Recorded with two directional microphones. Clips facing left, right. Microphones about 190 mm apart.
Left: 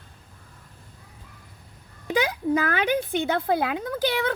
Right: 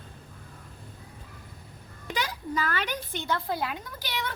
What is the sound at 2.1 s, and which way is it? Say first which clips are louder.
Speech: left 9 dB; 55° left (ahead or behind).